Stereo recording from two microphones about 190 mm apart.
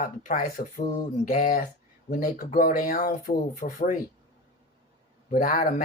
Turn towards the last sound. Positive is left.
turn(degrees=40)  # may be behind; listen again after turning